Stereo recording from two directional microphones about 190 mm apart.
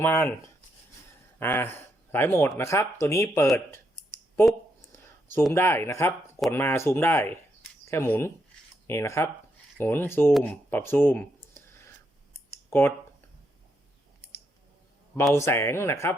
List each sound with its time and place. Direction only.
0.0 s speech: 10° left (ahead or behind)
1.4 s speech: 10° left (ahead or behind)
3.5 s clicking: 15° left (ahead or behind)
5.5 s speech: 10° left (ahead or behind)
11.5 s a sound: 15° left (ahead or behind)
15.1 s speech: 10° left (ahead or behind)